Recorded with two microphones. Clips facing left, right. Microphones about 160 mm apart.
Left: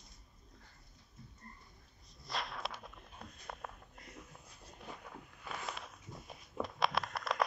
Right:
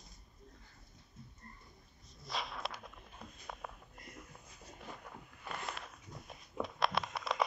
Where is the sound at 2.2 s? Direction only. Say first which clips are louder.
Even; centre (ahead or behind).